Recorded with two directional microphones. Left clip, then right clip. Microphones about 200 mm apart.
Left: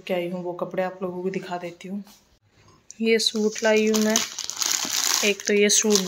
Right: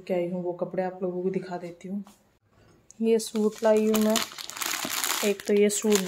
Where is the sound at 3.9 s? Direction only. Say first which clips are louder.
Left 2 dB; 10° right (ahead or behind).